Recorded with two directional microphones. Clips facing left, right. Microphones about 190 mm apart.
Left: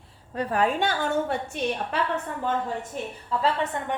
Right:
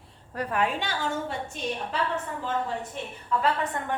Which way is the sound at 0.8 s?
55° left (ahead or behind).